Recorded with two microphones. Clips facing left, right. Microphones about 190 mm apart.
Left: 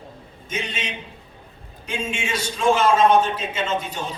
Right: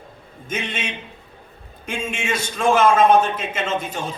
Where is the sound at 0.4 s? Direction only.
55° right (ahead or behind).